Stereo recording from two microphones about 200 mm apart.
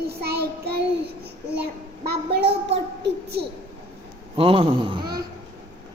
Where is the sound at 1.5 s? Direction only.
55° right (ahead or behind).